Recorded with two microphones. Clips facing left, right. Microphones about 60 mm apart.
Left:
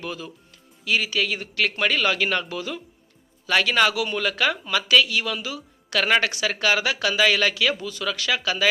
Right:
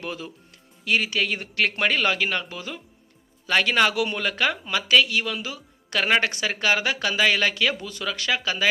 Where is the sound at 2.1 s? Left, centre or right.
Centre.